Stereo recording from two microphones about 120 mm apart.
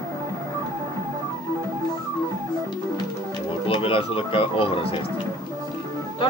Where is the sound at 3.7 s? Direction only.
50° left (ahead or behind).